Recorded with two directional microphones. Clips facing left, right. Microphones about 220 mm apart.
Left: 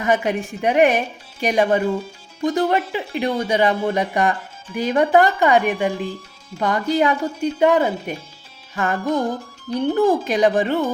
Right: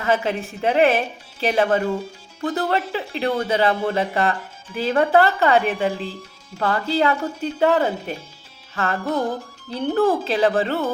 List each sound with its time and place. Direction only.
0.0 s speech: 15° left (ahead or behind)